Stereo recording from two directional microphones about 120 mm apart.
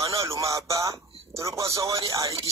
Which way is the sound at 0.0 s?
25° right (ahead or behind).